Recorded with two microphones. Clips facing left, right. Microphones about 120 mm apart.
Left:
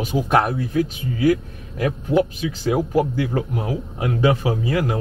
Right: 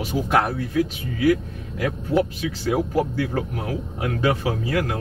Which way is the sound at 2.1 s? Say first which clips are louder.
Left 2 dB; 20° left (ahead or behind).